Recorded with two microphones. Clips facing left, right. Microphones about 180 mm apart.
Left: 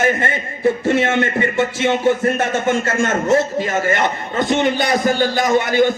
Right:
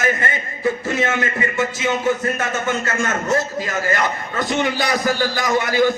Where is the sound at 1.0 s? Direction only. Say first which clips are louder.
Left 4 dB; 30° left (ahead or behind).